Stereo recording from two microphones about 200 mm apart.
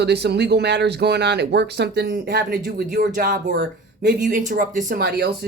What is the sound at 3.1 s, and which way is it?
Speech, 40° right (ahead or behind).